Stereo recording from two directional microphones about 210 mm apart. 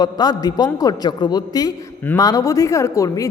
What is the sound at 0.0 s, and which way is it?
A woman's voice, 20° left (ahead or behind).